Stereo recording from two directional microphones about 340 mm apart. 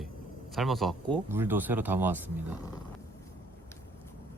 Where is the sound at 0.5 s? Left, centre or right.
Centre.